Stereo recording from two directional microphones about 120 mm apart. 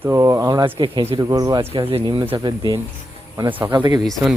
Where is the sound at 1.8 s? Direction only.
45° right (ahead or behind).